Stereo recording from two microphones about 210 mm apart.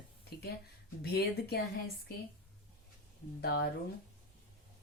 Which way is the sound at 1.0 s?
50° left (ahead or behind).